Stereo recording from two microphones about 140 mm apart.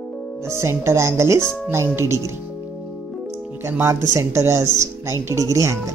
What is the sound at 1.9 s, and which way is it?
Speech, 20° right (ahead or behind).